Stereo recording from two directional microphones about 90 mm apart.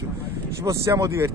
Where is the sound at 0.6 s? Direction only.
35° right (ahead or behind).